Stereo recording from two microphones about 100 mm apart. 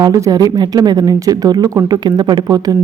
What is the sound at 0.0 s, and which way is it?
Speech, 35° right (ahead or behind).